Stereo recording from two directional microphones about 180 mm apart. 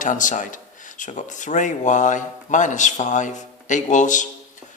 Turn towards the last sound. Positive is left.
turn(degrees=45)  # may be behind; listen again after turning